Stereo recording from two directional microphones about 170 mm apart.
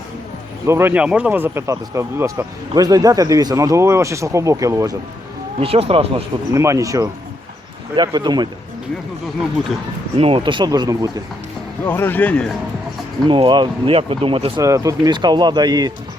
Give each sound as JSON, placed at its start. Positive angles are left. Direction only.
{"t": 0.7, "sound": "speech", "side_deg": -15}
{"t": 5.5, "sound": "speech", "side_deg": -35}
{"t": 6.5, "sound": "speech", "side_deg": -15}
{"t": 10.2, "sound": "speech", "side_deg": -35}
{"t": 11.9, "sound": "speech", "side_deg": 10}
{"t": 13.2, "sound": "speech", "side_deg": -25}
{"t": 14.6, "sound": "speech", "side_deg": -20}